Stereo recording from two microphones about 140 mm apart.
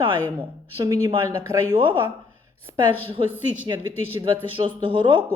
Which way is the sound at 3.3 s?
10° right (ahead or behind).